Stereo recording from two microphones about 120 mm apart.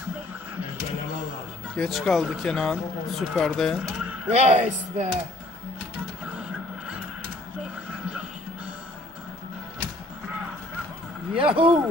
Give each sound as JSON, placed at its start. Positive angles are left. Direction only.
{"t": 1.8, "sound": "speech", "side_deg": 0}
{"t": 4.3, "sound": "speech", "side_deg": -65}
{"t": 11.3, "sound": "speech", "side_deg": -50}